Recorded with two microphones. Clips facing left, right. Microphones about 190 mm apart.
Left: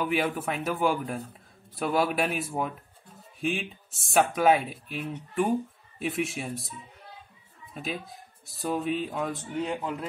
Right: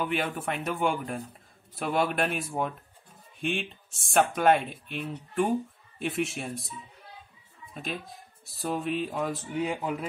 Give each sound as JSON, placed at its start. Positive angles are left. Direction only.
{"t": 0.0, "sound": "speech", "side_deg": 5}